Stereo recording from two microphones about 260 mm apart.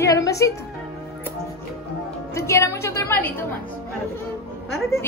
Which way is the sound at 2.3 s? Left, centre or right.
Centre.